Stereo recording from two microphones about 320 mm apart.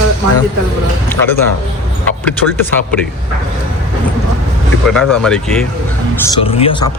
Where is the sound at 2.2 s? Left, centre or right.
Centre.